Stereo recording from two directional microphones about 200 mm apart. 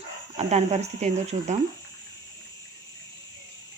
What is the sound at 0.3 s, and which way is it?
Speech, 35° right (ahead or behind).